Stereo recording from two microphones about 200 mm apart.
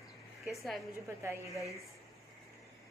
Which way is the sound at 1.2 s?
15° right (ahead or behind).